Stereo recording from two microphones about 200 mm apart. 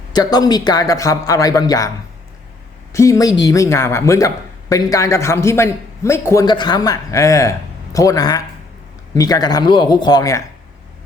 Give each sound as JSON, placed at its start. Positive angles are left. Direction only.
{"t": 0.1, "sound": "a man's voice", "side_deg": 20}
{"t": 2.9, "sound": "a man's voice", "side_deg": 15}